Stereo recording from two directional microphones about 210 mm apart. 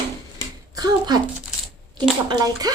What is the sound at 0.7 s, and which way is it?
A child's voice, 20° right (ahead or behind).